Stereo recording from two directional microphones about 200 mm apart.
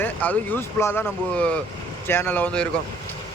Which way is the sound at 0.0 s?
10° left (ahead or behind).